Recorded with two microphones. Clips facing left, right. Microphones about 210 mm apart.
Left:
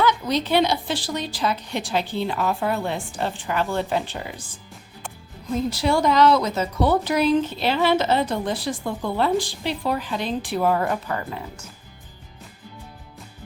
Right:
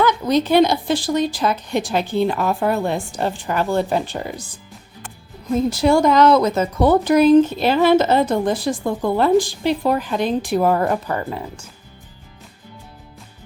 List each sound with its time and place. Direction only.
0.0 s speech: 50° right (ahead or behind)
5.7 s speech: 45° right (ahead or behind)